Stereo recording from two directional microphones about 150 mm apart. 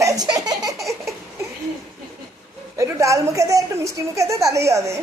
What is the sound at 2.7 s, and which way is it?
A woman's voice, 20° right (ahead or behind).